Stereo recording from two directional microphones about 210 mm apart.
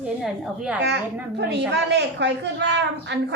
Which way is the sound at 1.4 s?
55° right (ahead or behind).